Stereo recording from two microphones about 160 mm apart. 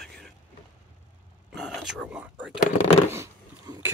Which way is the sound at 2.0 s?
5° right (ahead or behind).